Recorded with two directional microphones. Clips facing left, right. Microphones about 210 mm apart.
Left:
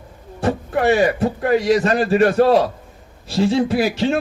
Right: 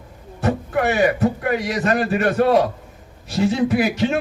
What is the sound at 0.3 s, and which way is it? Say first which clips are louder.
A man's voice: left 1 dB; 30° left (ahead or behind).